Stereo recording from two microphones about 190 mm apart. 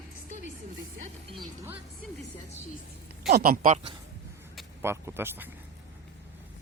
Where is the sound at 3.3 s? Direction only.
55° right (ahead or behind).